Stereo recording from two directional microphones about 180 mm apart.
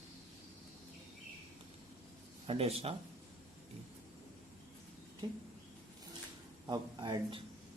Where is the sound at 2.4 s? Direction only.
35° right (ahead or behind).